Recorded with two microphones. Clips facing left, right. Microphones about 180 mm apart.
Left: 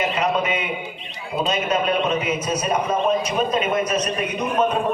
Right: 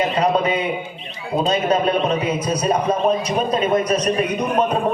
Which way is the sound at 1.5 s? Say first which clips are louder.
Right 3 dB; 35° right (ahead or behind).